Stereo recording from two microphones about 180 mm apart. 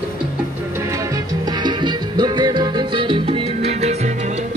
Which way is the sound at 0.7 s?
15° right (ahead or behind).